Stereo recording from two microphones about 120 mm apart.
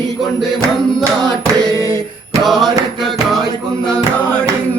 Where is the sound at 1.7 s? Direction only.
25° left (ahead or behind).